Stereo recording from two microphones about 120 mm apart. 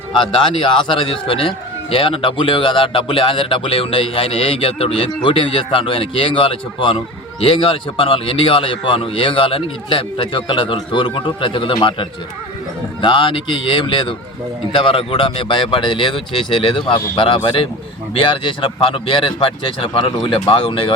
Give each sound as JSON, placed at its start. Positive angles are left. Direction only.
{"t": 0.2, "sound": "speech", "side_deg": 45}